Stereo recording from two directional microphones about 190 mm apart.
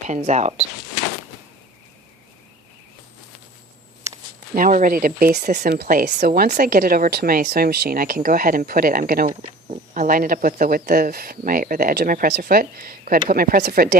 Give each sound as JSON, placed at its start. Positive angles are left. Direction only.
{"t": 0.1, "sound": "speech", "side_deg": -35}
{"t": 4.5, "sound": "a woman's voice", "side_deg": -45}